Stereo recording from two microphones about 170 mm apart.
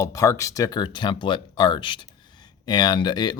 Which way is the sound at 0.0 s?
20° left (ahead or behind).